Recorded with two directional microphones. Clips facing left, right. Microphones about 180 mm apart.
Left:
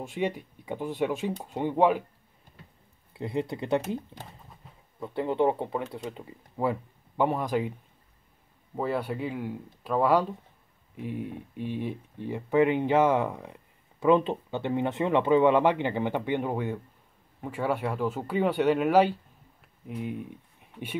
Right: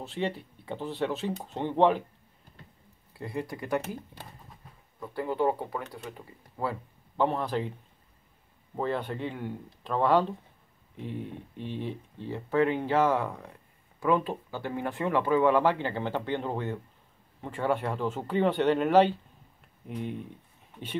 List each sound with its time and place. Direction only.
0.0 s speech: 15° left (ahead or behind)
3.1 s speech: 20° left (ahead or behind)
8.7 s speech: 10° left (ahead or behind)